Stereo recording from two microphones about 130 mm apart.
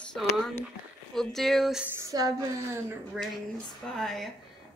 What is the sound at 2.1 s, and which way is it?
Speech, 30° right (ahead or behind).